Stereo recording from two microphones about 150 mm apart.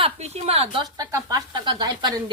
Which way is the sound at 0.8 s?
25° right (ahead or behind).